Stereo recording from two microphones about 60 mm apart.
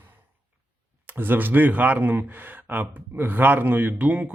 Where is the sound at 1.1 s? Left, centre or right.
Right.